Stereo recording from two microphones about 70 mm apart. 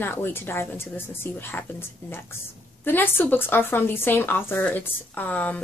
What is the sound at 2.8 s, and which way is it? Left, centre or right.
Speech, left.